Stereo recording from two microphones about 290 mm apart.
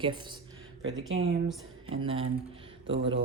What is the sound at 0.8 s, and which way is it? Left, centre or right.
Speech, right.